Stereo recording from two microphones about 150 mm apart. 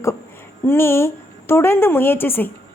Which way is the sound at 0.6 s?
15° left (ahead or behind).